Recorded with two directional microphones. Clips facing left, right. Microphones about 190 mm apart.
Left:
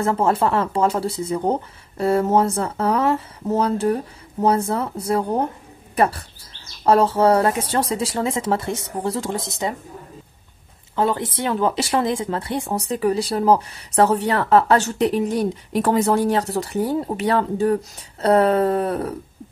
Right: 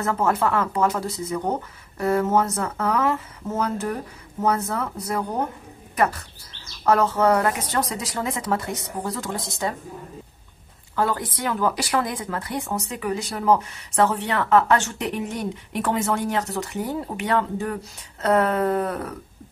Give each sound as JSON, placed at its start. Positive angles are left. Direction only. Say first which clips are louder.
{"t": 0.0, "sound": "speech", "louder": "left 3 dB", "side_deg": 30}
{"t": 11.0, "sound": "speech", "louder": "left 3 dB", "side_deg": 25}